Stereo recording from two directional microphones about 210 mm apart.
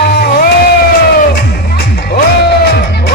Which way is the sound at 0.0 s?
45° left (ahead or behind).